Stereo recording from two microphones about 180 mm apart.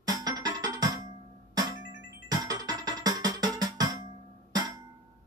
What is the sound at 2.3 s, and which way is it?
Music, 20° right (ahead or behind).